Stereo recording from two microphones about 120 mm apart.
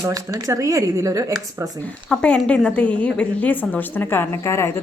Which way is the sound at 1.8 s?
10° left (ahead or behind).